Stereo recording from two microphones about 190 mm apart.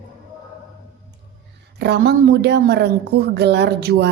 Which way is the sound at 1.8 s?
60° right (ahead or behind).